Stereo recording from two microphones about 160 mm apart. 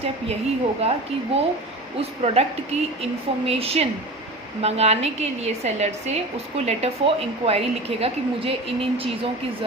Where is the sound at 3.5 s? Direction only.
40° right (ahead or behind).